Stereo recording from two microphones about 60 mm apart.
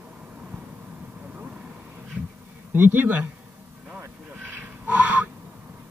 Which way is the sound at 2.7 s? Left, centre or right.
Right.